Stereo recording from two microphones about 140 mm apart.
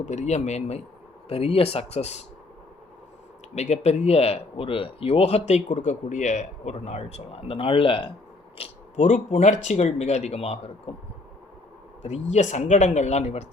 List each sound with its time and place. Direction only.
0.0 s speech: 60° left (ahead or behind)
3.5 s speech: 55° left (ahead or behind)
8.5 s speech: 50° left (ahead or behind)
12.0 s speech: 55° left (ahead or behind)